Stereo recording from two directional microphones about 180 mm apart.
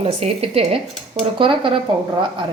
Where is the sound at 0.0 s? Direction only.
35° right (ahead or behind).